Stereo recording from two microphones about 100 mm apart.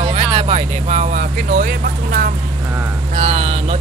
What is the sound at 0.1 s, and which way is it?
Vehicle, 90° right.